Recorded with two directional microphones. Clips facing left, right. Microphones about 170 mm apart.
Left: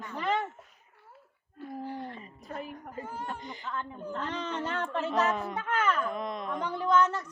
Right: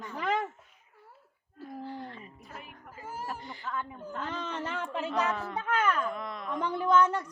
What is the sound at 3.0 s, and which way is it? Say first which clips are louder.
Speech: right 2 dB; 5° right (ahead or behind).